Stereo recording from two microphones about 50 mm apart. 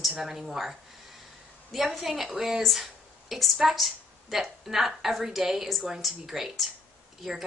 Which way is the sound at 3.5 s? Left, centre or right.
Centre.